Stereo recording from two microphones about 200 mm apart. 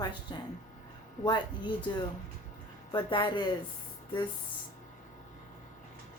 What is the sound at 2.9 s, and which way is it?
Speech, 25° left (ahead or behind).